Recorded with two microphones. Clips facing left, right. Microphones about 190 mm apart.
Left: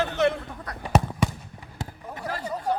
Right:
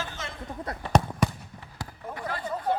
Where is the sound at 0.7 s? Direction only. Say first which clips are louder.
Right 3 dB; 25° right (ahead or behind).